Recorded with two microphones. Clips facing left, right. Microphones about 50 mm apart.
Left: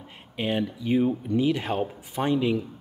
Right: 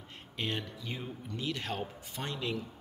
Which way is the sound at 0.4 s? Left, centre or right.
Centre.